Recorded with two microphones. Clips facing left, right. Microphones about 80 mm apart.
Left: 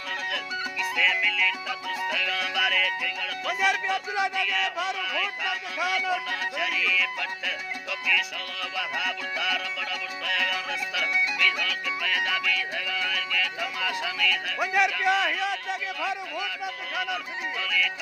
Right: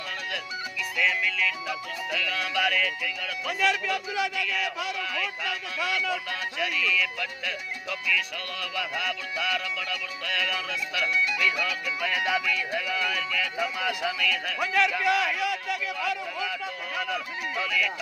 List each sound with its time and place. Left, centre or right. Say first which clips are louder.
0.8 s music: left 1 dB; centre
3.6 s speech: even; centre
4.4 s music: left 2 dB; centre
5.5 s speech: left 2 dB; centre
6.6 s music: right 1 dB; centre
11.6 s music: right 1 dB; centre
14.6 s speech: left 1 dB; centre
17.6 s music: right 1 dB; centre